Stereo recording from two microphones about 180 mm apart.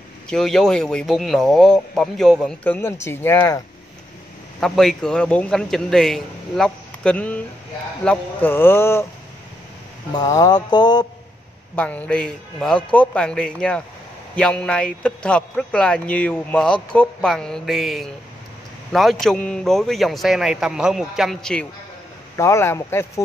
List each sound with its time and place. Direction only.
0.3 s speech: 5° left (ahead or behind)
4.6 s speech: centre (ahead or behind)
10.1 s mantra: 20° left (ahead or behind)
11.7 s speech: 10° left (ahead or behind)
22.4 s speech: 15° left (ahead or behind)